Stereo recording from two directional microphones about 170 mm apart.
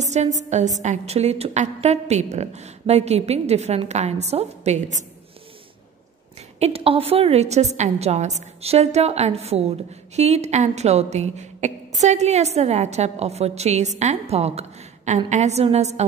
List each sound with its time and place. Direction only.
0.0 s a sound: 45° right (ahead or behind)
0.5 s a woman's voice: 45° right (ahead or behind)
6.6 s a woman's voice: 35° right (ahead or behind)